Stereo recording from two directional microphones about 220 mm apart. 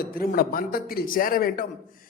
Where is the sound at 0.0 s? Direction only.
40° left (ahead or behind).